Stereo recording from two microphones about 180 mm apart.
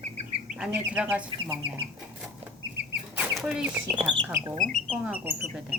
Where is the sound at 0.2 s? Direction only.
40° right (ahead or behind).